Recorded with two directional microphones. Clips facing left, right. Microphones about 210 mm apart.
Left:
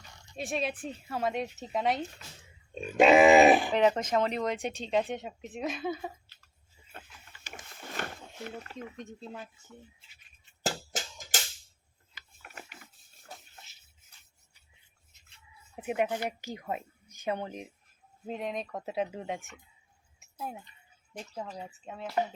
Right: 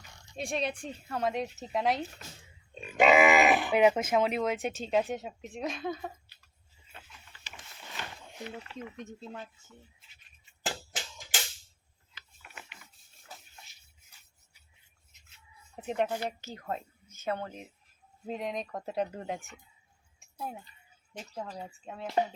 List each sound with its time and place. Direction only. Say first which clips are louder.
0.3 s speech: even; centre (ahead or behind)
3.0 s grunt: left 4 dB; 35° left (ahead or behind)
3.7 s speech: right 1 dB; 10° right (ahead or behind)
6.9 s a sound: left 3 dB; 50° left (ahead or behind)
9.0 s speech: even; centre (ahead or behind)
10.6 s music: left 4 dB; 40° left (ahead or behind)
12.4 s rub: left 3 dB; 45° left (ahead or behind)
15.3 s speech: even; 5° left (ahead or behind)
18.3 s speech: even; centre (ahead or behind)
21.2 s speech: even; 5° right (ahead or behind)